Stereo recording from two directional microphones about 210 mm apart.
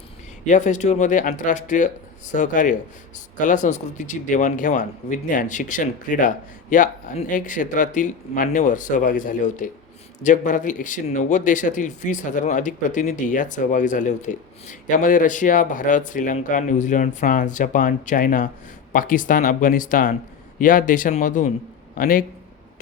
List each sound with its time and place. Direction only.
0.4 s speech: 35° left (ahead or behind)